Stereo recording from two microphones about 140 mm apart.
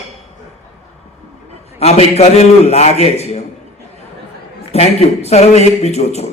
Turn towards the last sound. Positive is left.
turn(degrees=50)  # may be behind; listen again after turning